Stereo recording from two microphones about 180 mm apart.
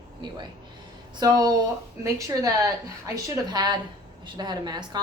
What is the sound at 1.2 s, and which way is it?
A woman's voice, 25° right (ahead or behind).